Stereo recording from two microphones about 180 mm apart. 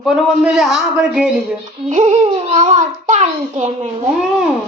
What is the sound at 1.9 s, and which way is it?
A child's voice, 40° right (ahead or behind).